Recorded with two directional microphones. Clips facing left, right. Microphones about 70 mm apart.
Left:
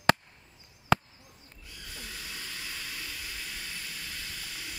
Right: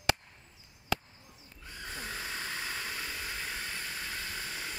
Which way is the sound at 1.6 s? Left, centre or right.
Right.